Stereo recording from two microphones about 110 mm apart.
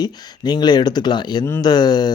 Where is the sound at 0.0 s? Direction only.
40° left (ahead or behind).